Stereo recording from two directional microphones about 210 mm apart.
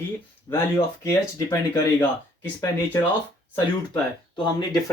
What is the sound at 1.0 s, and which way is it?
Speech, 15° left (ahead or behind).